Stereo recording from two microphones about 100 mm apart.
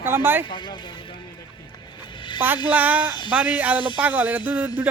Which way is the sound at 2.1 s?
55° left (ahead or behind).